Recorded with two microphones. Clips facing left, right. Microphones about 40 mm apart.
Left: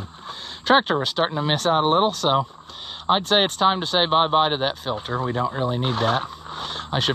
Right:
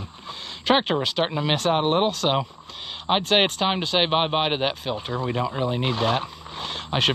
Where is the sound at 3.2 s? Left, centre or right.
Right.